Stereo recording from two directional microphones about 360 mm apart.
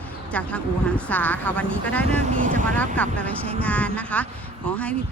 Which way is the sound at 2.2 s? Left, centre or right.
Right.